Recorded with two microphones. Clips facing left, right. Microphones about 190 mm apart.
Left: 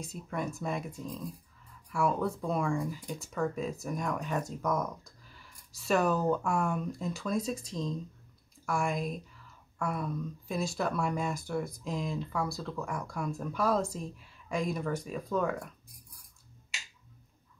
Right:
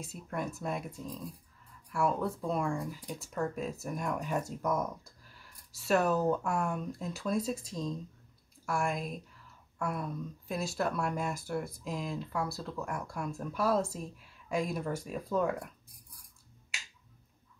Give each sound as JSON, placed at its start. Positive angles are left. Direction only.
{"t": 0.0, "sound": "speech", "side_deg": -5}
{"t": 1.9, "sound": "speech", "side_deg": 0}